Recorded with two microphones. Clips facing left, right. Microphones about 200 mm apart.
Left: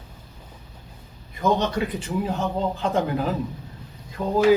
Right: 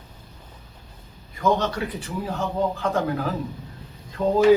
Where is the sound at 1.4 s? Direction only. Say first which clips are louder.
Even; 15° left (ahead or behind).